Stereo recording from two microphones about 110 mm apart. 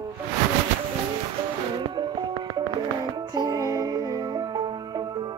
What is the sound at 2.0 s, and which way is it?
Music, 40° right (ahead or behind).